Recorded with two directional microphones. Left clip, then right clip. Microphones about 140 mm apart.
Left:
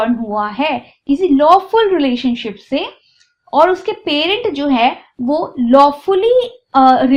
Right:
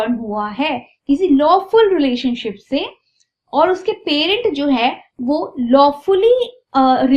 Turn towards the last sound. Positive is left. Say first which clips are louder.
# left 4 dB
turn(degrees=50)  # may be behind; listen again after turning